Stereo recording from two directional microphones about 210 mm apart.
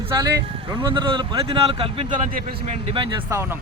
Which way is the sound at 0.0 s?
15° right (ahead or behind).